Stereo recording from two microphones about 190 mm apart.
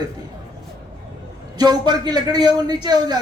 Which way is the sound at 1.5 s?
20° right (ahead or behind).